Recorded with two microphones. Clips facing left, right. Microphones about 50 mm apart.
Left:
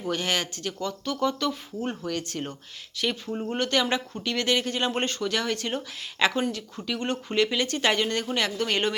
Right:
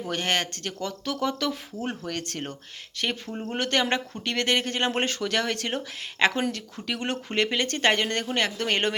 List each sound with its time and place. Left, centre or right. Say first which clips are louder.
0.1 s speech: even; right
2.0 s speech: left 2 dB; right
2.9 s speech: left 1 dB; right
5.0 s speech: right 1 dB; right
7.3 s speech: left 1 dB; right